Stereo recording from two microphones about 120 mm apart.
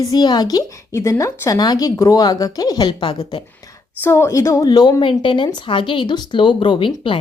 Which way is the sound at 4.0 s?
20° left (ahead or behind).